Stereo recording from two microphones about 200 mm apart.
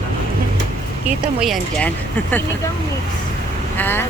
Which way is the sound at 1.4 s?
5° left (ahead or behind).